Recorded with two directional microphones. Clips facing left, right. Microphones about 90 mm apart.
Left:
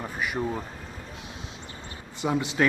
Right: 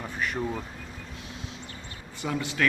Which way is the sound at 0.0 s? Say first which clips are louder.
Left 1 dB; 10° left (ahead or behind).